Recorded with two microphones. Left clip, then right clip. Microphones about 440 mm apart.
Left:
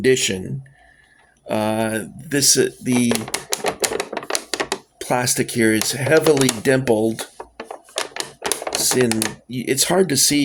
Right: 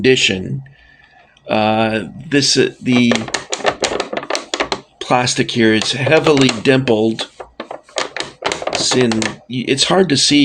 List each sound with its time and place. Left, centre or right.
0.0 s speech: left
7.5 s typewriter: left
9.1 s speech: left